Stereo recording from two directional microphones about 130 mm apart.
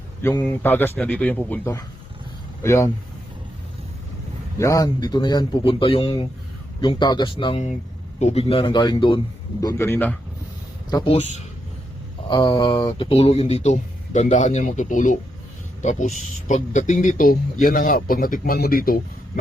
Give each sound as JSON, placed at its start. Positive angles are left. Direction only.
{"t": 0.2, "sound": "a man's voice", "side_deg": 15}
{"t": 4.5, "sound": "a man's voice", "side_deg": 25}
{"t": 8.2, "sound": "a man's voice", "side_deg": 50}
{"t": 8.6, "sound": "a man's voice", "side_deg": 35}
{"t": 9.6, "sound": "a man's voice", "side_deg": 20}
{"t": 11.0, "sound": "a man's voice", "side_deg": 50}
{"t": 12.3, "sound": "speech", "side_deg": 35}
{"t": 15.8, "sound": "a man's voice", "side_deg": 65}